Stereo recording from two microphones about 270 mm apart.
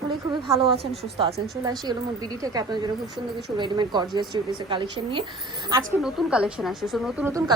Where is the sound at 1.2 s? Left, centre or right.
Centre.